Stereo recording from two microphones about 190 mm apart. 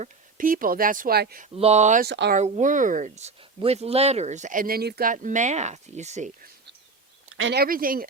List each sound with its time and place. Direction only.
0.0 s speech: 45° right (ahead or behind)
1.5 s speech: 35° right (ahead or behind)
2.0 s speech: 65° right (ahead or behind)
2.3 s speech: 40° right (ahead or behind)
7.3 s a sound: 90° right
7.6 s speech: 50° right (ahead or behind)